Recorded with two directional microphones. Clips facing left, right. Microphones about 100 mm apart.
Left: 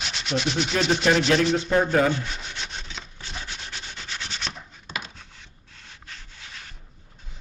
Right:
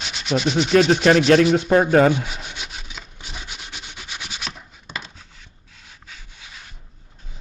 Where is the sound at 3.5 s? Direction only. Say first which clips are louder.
Even; 15° right (ahead or behind).